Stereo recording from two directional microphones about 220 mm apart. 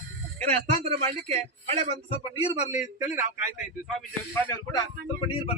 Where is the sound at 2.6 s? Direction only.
30° left (ahead or behind).